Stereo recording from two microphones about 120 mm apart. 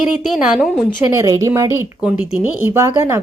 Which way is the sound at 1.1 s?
30° right (ahead or behind).